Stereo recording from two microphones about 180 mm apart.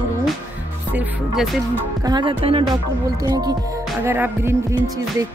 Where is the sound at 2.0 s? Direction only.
25° right (ahead or behind).